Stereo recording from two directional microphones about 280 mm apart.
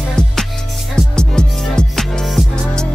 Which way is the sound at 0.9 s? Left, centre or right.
Centre.